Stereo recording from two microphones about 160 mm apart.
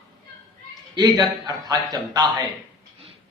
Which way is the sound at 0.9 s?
25° right (ahead or behind).